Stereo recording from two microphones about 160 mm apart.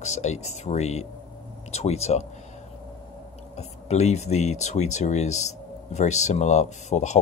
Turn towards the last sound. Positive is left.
turn(degrees=45)  # may be behind; listen again after turning